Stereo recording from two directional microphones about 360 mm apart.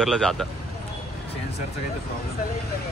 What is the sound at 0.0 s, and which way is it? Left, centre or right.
Speech, centre.